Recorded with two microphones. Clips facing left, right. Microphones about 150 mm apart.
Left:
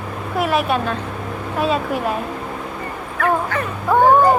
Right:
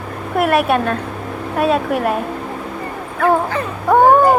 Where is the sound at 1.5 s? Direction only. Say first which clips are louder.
Right 4 dB; 60° right (ahead or behind).